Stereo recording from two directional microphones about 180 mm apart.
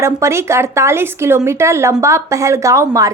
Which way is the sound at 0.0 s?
15° right (ahead or behind).